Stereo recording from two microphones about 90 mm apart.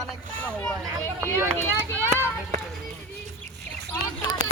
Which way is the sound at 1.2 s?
30° right (ahead or behind).